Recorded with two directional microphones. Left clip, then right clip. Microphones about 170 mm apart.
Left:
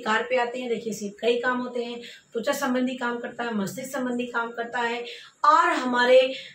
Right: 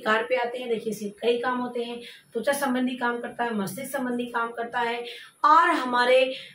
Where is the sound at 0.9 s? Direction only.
Centre (ahead or behind).